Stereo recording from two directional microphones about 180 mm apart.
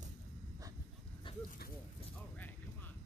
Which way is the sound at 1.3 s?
30° left (ahead or behind).